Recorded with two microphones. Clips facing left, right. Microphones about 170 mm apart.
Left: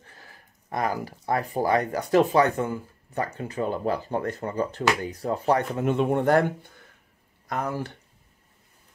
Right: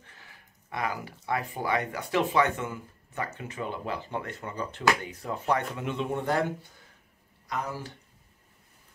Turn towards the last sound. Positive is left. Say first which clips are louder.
# left 5 dB
turn(degrees=55)  # may be behind; listen again after turning